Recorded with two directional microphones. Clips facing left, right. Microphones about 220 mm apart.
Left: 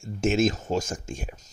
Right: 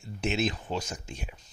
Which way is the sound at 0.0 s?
45° left (ahead or behind).